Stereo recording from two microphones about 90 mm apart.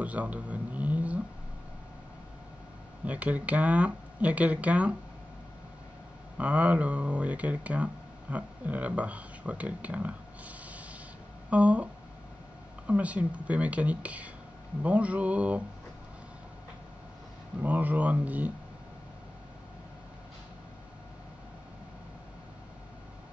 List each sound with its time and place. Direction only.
0.0 s a sound: 15° right (ahead or behind)
3.1 s speech: 15° right (ahead or behind)
6.3 s speech: 15° right (ahead or behind)
17.6 s speech: 20° right (ahead or behind)